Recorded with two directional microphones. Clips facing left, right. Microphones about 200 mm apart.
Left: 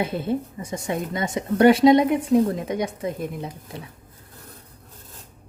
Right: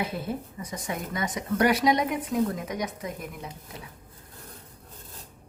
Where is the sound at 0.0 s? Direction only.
25° left (ahead or behind).